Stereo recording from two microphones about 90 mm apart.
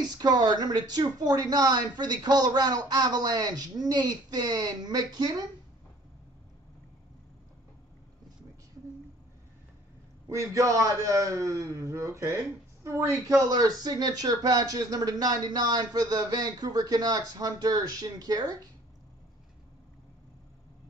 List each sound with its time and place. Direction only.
0.0 s speech: 50° right (ahead or behind)
10.3 s a man's voice: 35° right (ahead or behind)
13.4 s speech: 45° right (ahead or behind)